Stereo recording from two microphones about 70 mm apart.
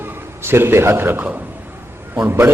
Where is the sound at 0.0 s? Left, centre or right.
Right.